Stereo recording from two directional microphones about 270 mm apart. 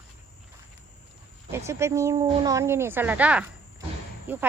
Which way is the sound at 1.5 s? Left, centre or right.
Centre.